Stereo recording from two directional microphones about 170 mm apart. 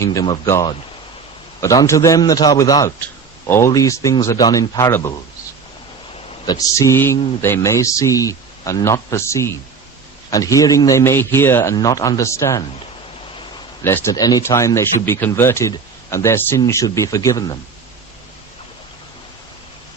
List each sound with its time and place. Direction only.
0.0 s a man's voice: 20° left (ahead or behind)
6.4 s a man's voice: 20° left (ahead or behind)
13.8 s speech: 15° left (ahead or behind)